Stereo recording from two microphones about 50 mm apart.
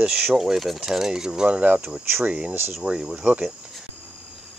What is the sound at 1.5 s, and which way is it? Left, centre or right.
Speech, right.